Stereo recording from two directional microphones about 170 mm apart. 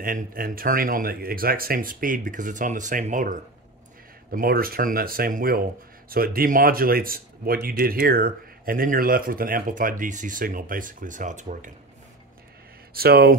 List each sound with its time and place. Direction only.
0.0 s speech: 55° right (ahead or behind)
4.3 s speech: 60° right (ahead or behind)
12.9 s speech: 65° right (ahead or behind)